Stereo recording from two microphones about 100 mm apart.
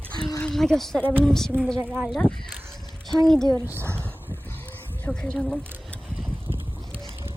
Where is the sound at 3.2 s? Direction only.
5° left (ahead or behind).